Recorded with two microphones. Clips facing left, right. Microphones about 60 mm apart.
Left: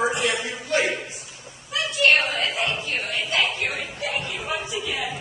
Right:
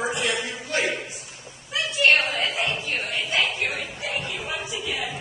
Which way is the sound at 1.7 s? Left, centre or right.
Right.